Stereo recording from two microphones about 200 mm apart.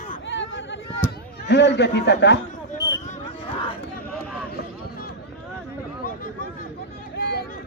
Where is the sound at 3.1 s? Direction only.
30° left (ahead or behind).